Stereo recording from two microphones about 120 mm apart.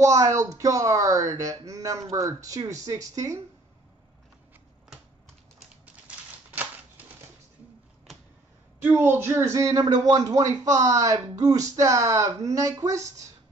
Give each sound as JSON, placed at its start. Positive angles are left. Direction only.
{"t": 0.0, "sound": "speech", "side_deg": -25}
{"t": 6.0, "sound": "typewriter", "side_deg": -15}
{"t": 8.8, "sound": "speech", "side_deg": -20}